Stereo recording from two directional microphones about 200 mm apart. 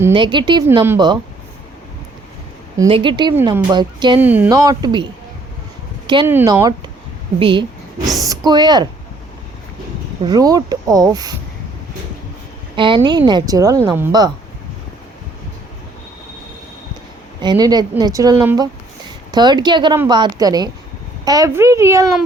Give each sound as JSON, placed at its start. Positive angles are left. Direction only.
{"t": 0.1, "sound": "speech", "side_deg": -25}
{"t": 2.9, "sound": "speech", "side_deg": -25}
{"t": 4.2, "sound": "speech", "side_deg": -10}
{"t": 6.2, "sound": "speech", "side_deg": -15}
{"t": 8.0, "sound": "a woman's voice", "side_deg": 0}
{"t": 8.3, "sound": "speech", "side_deg": -20}
{"t": 10.2, "sound": "speech", "side_deg": -20}
{"t": 12.7, "sound": "speech", "side_deg": -25}
{"t": 17.4, "sound": "speech", "side_deg": -20}